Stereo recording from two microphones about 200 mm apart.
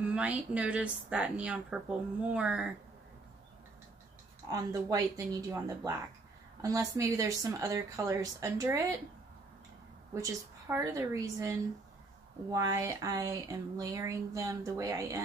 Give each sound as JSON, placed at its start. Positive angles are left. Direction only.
{"t": 0.1, "sound": "a woman's voice", "side_deg": -5}
{"t": 4.5, "sound": "speech", "side_deg": -15}
{"t": 10.1, "sound": "speech", "side_deg": -15}